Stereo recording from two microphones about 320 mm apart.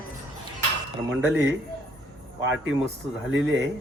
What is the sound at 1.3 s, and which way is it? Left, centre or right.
Speech, right.